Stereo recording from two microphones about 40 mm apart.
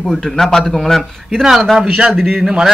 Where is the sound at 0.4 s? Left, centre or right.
Centre.